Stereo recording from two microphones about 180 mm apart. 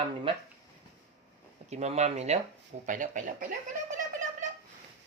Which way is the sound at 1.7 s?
40° right (ahead or behind).